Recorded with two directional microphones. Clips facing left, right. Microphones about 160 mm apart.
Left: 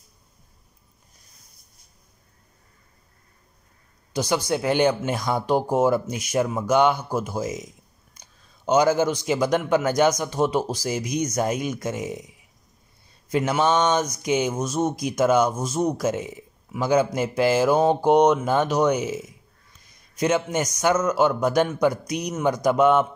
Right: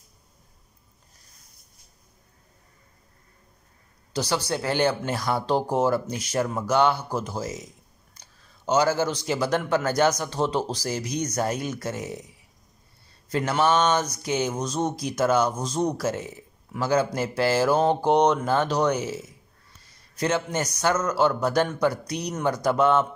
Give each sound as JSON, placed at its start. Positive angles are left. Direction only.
{"t": 4.1, "sound": "speech", "side_deg": 15}
{"t": 8.6, "sound": "a man's voice", "side_deg": 15}